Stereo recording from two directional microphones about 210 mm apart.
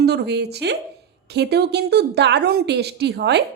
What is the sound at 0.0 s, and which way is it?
A woman's voice, 50° right (ahead or behind).